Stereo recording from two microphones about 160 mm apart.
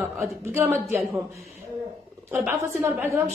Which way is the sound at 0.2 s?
15° right (ahead or behind).